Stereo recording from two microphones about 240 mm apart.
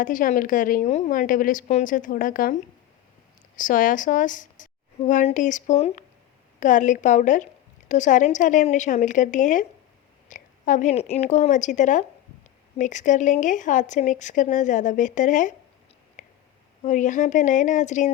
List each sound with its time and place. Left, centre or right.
0.0 s a woman's voice: left
3.6 s a woman's voice: left
16.2 s a sound: left
16.8 s a woman's voice: left